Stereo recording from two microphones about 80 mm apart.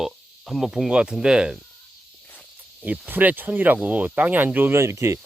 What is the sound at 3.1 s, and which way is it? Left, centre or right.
Speech, right.